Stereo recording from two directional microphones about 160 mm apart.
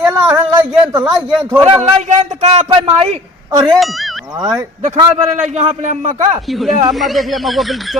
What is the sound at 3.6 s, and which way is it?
Speech, centre (ahead or behind).